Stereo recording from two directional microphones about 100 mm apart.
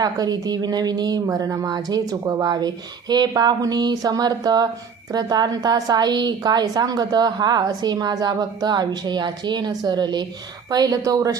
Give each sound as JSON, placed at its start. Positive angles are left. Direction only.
{"t": 0.0, "sound": "a woman's voice", "side_deg": -40}